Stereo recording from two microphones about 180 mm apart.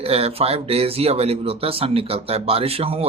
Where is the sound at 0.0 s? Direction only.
35° right (ahead or behind).